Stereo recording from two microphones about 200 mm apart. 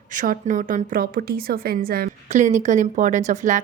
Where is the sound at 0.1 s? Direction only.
40° right (ahead or behind).